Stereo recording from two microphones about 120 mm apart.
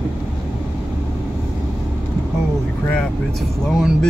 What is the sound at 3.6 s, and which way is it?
Speech, centre (ahead or behind).